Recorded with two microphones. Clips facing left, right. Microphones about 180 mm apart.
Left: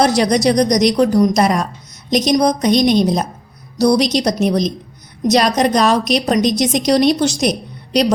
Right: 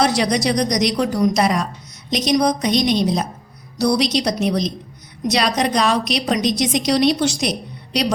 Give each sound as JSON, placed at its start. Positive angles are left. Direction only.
{"t": 0.0, "sound": "a woman's voice", "side_deg": 45}